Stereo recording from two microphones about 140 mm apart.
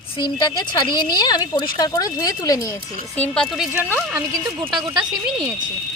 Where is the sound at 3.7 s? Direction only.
15° right (ahead or behind).